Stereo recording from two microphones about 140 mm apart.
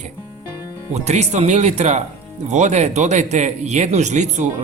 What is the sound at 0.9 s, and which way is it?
Speech, 50° right (ahead or behind).